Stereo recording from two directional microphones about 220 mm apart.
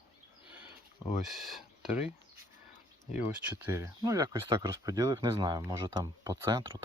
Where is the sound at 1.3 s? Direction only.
Centre (ahead or behind).